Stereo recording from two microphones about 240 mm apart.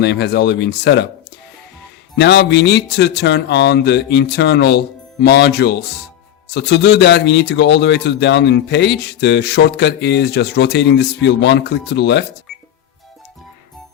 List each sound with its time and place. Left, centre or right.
0.0 s a man's voice: left
2.1 s a man's voice: left